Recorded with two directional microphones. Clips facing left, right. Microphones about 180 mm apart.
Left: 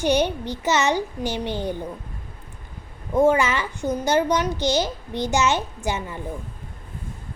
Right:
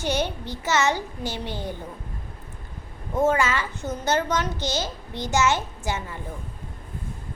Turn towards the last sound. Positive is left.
turn(degrees=15)  # may be behind; listen again after turning